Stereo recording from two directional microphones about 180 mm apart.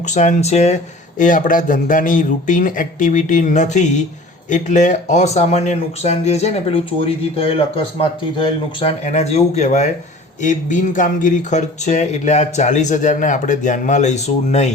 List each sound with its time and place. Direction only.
0.0 s speech: 40° left (ahead or behind)